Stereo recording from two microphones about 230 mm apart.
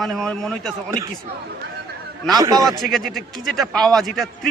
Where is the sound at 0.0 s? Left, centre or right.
Centre.